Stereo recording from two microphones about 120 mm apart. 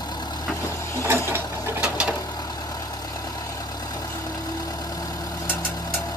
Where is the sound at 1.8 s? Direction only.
10° right (ahead or behind).